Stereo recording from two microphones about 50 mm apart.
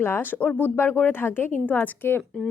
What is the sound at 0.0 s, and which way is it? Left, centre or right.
Speech, left.